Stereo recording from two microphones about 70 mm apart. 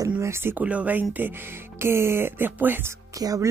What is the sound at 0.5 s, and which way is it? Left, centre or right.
Speech, centre.